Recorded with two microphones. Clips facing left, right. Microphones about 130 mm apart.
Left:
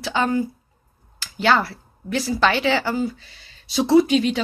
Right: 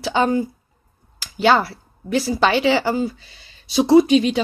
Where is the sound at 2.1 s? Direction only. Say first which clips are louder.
Right 2 dB; 15° right (ahead or behind).